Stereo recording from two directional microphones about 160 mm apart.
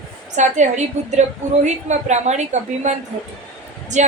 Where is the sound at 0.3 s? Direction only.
50° right (ahead or behind).